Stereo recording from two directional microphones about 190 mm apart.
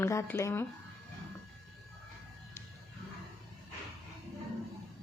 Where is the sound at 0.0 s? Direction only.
15° left (ahead or behind).